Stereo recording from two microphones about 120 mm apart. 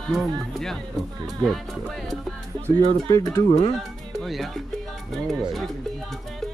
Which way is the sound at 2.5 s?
35° right (ahead or behind).